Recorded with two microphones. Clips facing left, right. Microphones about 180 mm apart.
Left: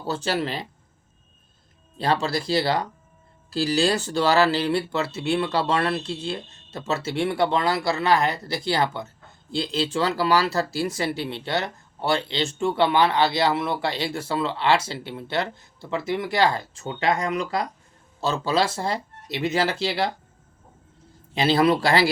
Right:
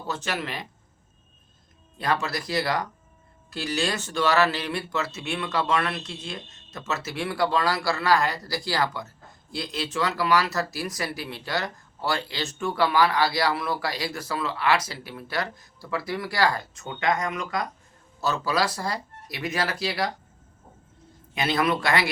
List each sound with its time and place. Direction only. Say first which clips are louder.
0.0 s speech: left 5 dB; 30° left (ahead or behind)
2.0 s speech: left 4 dB; 30° left (ahead or behind)
21.3 s speech: left 5 dB; 30° left (ahead or behind)